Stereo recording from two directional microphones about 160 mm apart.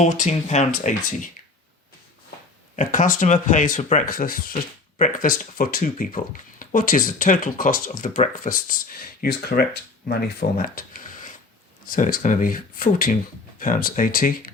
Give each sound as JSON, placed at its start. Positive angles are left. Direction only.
{"t": 0.0, "sound": "speech", "side_deg": 45}
{"t": 2.7, "sound": "speech", "side_deg": 55}